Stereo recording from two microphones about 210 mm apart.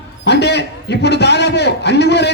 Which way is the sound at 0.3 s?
55° left (ahead or behind).